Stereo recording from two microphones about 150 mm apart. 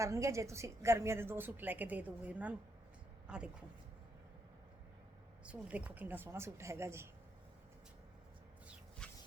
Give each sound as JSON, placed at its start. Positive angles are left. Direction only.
{"t": 0.0, "sound": "a woman's voice", "side_deg": -20}
{"t": 5.5, "sound": "a woman's voice", "side_deg": -10}
{"t": 9.0, "sound": "a sound", "side_deg": 5}